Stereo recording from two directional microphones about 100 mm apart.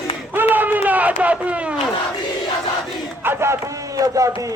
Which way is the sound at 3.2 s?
25° right (ahead or behind).